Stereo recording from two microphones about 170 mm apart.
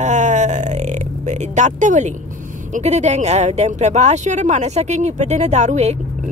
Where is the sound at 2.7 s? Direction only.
40° right (ahead or behind).